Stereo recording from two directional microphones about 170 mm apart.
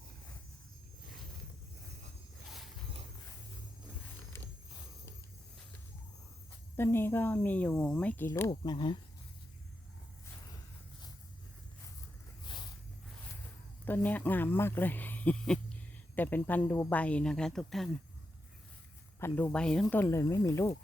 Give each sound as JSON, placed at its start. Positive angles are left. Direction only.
{"t": 4.3, "sound": "wild animals", "side_deg": 15}
{"t": 6.7, "sound": "speech", "side_deg": 15}
{"t": 8.4, "sound": "speech", "side_deg": 25}
{"t": 12.5, "sound": "a sound", "side_deg": 25}
{"t": 13.8, "sound": "speech", "side_deg": 10}
{"t": 19.2, "sound": "speech", "side_deg": 10}